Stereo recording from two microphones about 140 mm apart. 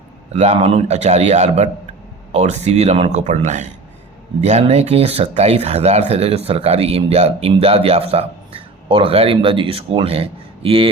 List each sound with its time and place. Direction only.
0.3 s speech: 50° right (ahead or behind)